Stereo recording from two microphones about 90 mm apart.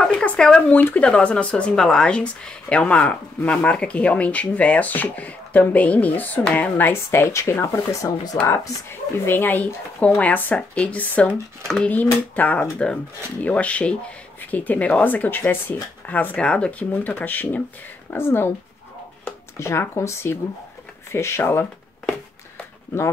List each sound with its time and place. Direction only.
0.0 s speech: 10° left (ahead or behind); by 8.4 s 35° left (ahead or behind)
9.2 s speech: 25° left (ahead or behind)
11.6 s speech: 5° left (ahead or behind)
11.9 s speech: 20° left (ahead or behind)